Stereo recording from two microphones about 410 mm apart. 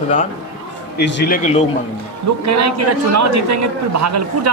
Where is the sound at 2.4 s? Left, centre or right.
Right.